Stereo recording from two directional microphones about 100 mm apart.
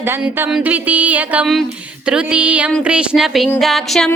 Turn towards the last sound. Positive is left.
turn(degrees=0)  # may be behind; listen again after turning